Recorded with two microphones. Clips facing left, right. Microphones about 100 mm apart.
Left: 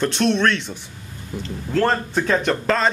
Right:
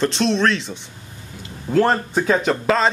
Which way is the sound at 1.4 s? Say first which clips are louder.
Right 3 dB; 15° right (ahead or behind).